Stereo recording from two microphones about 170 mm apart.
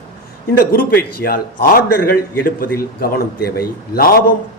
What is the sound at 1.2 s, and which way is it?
A man's voice, 60° left (ahead or behind).